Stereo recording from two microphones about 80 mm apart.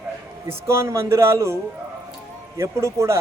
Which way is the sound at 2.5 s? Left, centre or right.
Right.